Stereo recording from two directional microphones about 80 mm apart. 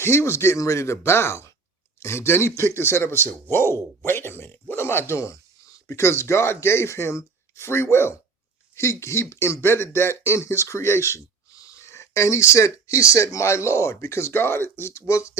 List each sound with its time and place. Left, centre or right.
0.0 s speech: left